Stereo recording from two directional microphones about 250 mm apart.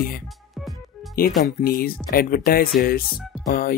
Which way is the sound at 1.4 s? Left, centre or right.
Left.